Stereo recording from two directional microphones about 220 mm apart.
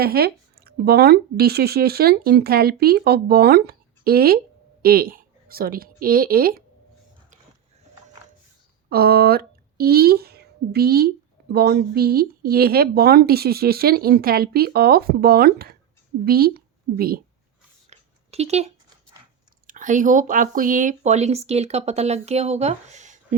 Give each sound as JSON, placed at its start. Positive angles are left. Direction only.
{"t": 0.0, "sound": "speech", "side_deg": -45}
{"t": 8.9, "sound": "speech", "side_deg": -45}
{"t": 17.8, "sound": "a sound", "side_deg": -30}
{"t": 19.6, "sound": "speech", "side_deg": -35}